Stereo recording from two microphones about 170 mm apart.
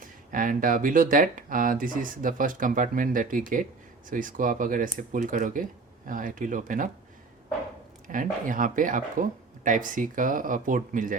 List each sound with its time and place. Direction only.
0.3 s speech: 50° right (ahead or behind)
8.0 s speech: 50° right (ahead or behind)